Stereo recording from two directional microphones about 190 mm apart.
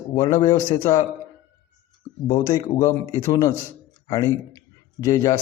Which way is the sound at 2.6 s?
15° left (ahead or behind).